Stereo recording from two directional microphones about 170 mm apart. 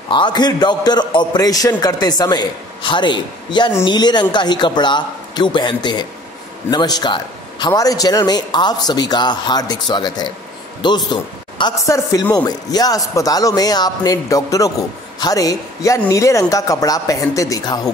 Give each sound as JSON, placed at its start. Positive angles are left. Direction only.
{"t": 0.1, "sound": "a man's voice", "side_deg": 25}